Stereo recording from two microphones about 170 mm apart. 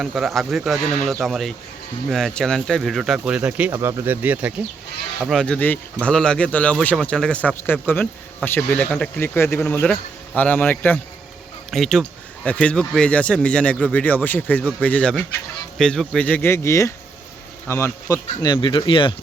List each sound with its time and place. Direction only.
0.0 s speech: centre (ahead or behind)
5.2 s speech: centre (ahead or behind); by 19.1 s 30° left (ahead or behind)